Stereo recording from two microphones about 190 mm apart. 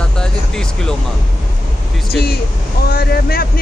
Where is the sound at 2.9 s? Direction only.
55° left (ahead or behind).